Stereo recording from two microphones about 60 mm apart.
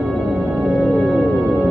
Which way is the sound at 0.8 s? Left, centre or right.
Centre.